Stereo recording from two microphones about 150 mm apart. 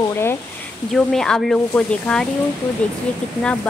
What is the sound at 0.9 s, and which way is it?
Speech, 5° left (ahead or behind).